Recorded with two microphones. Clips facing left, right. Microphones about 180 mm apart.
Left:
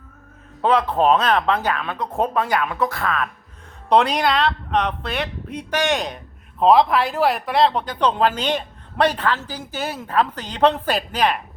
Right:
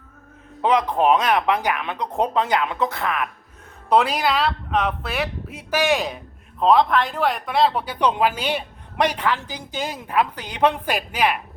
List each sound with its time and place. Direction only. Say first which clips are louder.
0.6 s speech: left 1 dB; 15° right (ahead or behind)
3.8 s speech: left 2 dB; 5° right (ahead or behind)